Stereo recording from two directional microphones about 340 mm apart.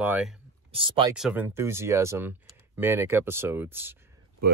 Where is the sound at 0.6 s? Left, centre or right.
Centre.